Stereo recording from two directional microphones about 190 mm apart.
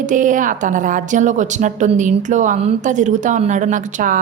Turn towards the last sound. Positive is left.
turn(degrees=-45)  # may be behind; listen again after turning